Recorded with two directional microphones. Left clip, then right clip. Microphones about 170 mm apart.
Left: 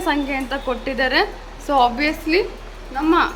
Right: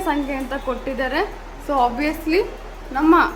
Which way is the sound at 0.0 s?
5° left (ahead or behind).